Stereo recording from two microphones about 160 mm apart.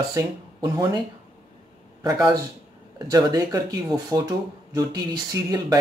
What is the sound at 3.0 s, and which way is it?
Speech, 25° right (ahead or behind).